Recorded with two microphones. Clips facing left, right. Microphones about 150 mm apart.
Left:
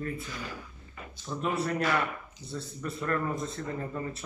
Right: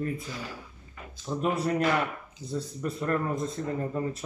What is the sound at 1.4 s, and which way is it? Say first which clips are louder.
Speech: right 3 dB; 40° right (ahead or behind).